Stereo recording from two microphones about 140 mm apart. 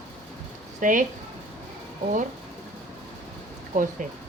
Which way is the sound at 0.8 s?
65° right (ahead or behind).